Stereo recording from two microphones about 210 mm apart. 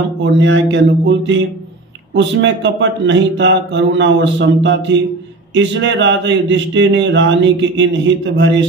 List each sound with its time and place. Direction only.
0.2 s speech: 60° right (ahead or behind)